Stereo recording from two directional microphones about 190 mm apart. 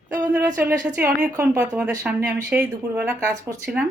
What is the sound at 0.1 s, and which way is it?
A woman's voice, 10° right (ahead or behind).